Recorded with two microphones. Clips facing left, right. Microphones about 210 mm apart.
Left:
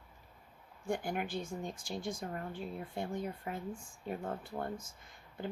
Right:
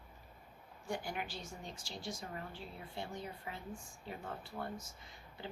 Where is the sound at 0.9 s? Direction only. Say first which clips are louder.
Left 6 dB; 50° left (ahead or behind).